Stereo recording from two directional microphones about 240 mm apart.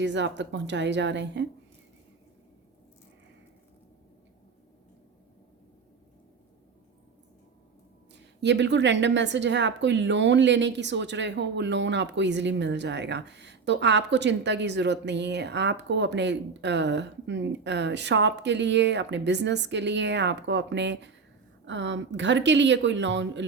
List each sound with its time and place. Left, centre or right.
0.0 s a woman's voice: right
8.4 s a woman's voice: right